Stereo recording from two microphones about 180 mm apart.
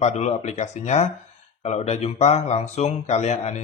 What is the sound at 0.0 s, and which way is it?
Speech, 40° left (ahead or behind).